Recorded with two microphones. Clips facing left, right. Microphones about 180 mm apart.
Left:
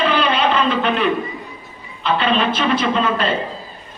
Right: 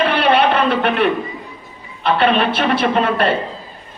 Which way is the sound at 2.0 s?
60° right (ahead or behind).